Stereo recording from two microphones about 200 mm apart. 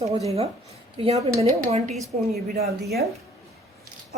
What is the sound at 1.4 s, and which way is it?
Speech, 35° right (ahead or behind).